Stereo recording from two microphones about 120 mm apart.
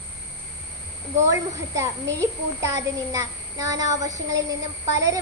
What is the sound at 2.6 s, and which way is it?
A child's voice, 25° right (ahead or behind).